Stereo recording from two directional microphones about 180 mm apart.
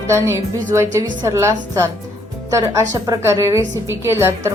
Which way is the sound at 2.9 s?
15° right (ahead or behind).